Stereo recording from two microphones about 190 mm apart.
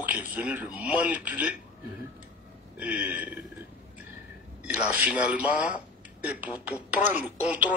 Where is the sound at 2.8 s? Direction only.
5° right (ahead or behind).